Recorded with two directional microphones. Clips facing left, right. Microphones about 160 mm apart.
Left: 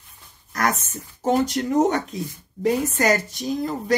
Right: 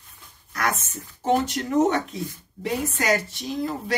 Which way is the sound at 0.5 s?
45° left (ahead or behind).